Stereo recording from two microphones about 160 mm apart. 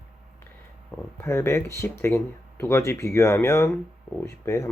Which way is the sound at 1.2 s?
15° left (ahead or behind).